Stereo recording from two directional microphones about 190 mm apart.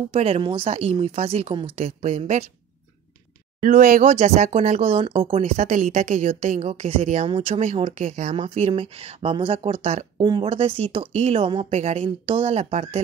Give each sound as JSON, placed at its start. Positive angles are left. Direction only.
{"t": 0.1, "sound": "speech", "side_deg": -30}
{"t": 3.6, "sound": "speech", "side_deg": -45}